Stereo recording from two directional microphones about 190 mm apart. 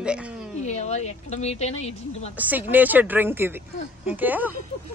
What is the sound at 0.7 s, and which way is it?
Speech, 35° left (ahead or behind).